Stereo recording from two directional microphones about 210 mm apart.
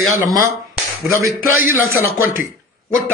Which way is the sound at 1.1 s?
15° right (ahead or behind).